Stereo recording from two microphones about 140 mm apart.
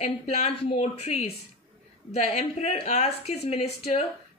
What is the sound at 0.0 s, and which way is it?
A woman's voice, 50° left (ahead or behind).